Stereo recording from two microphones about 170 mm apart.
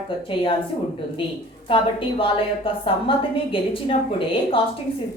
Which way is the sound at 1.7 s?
30° left (ahead or behind).